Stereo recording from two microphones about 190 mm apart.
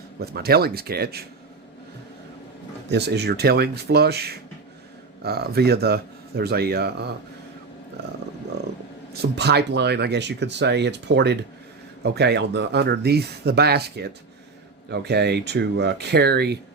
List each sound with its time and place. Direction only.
0.2 s speech: 55° right (ahead or behind)
2.9 s speech: 60° right (ahead or behind)
9.2 s speech: 60° right (ahead or behind)